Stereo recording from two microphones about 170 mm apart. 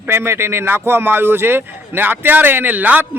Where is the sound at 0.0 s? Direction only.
15° right (ahead or behind).